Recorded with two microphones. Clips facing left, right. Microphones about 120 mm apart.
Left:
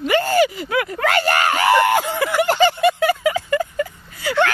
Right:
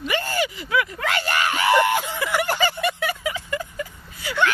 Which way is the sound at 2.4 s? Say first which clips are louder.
Left 7 dB; 25° left (ahead or behind).